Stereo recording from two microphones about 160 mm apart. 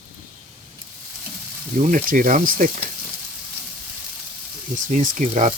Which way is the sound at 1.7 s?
55° right (ahead or behind).